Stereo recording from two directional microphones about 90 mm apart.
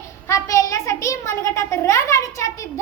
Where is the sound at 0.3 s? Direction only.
35° left (ahead or behind).